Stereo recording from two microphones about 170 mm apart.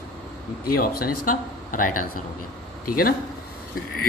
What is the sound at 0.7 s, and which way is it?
Speech, 60° left (ahead or behind).